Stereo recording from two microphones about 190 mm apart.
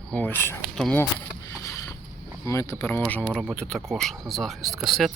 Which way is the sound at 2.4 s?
15° left (ahead or behind).